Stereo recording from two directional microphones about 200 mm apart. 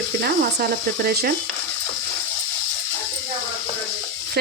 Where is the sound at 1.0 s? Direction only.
50° right (ahead or behind).